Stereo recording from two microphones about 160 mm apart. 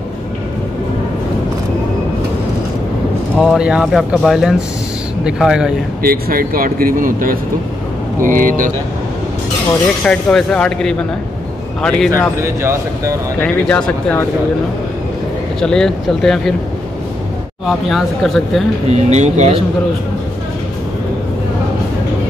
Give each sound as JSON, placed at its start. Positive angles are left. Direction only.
{"t": 3.3, "sound": "speech", "side_deg": -5}
{"t": 6.0, "sound": "speech", "side_deg": -65}
{"t": 10.0, "sound": "speech", "side_deg": 5}
{"t": 12.4, "sound": "speech", "side_deg": -15}
{"t": 13.4, "sound": "speech", "side_deg": 5}
{"t": 15.6, "sound": "speech", "side_deg": 5}
{"t": 17.6, "sound": "speech", "side_deg": 0}
{"t": 18.9, "sound": "speech", "side_deg": -45}